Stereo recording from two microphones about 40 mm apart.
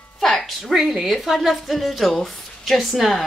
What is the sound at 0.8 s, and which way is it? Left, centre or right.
A woman's voice, centre.